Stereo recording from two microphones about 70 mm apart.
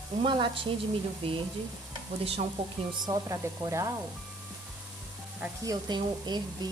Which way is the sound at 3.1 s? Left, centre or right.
Right.